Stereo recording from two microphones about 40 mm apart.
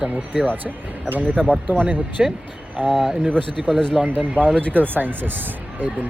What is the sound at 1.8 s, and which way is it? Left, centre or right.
Speech, right.